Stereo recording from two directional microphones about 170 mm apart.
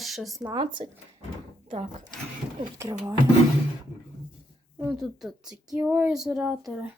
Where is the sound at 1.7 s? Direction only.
45° right (ahead or behind).